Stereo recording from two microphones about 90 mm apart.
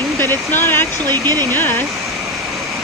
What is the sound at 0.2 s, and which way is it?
Speech, 25° left (ahead or behind).